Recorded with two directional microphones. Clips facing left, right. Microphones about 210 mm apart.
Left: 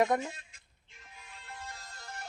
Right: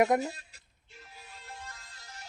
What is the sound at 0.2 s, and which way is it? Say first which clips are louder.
Music: right 4 dB; 40° right (ahead or behind).